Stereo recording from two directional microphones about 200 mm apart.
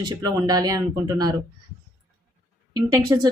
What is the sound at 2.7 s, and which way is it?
Speech, 15° right (ahead or behind).